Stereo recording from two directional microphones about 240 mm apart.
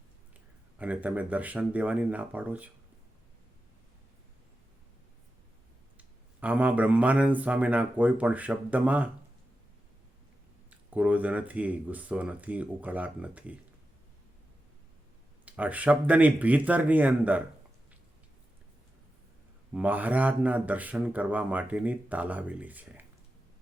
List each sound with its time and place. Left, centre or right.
0.8 s speech: centre
6.0 s speech: centre
10.7 s speech: centre
15.4 s speech: centre
19.7 s speech: centre